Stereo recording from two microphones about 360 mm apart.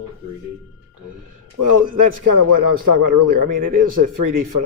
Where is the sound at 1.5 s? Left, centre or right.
Right.